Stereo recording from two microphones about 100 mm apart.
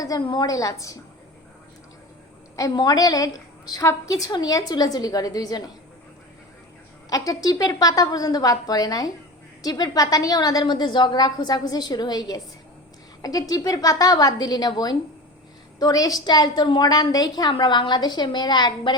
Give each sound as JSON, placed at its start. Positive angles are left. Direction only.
{"t": 0.3, "sound": "a woman's voice", "side_deg": 40}
{"t": 2.6, "sound": "a woman's voice", "side_deg": 40}
{"t": 7.1, "sound": "a woman's voice", "side_deg": 35}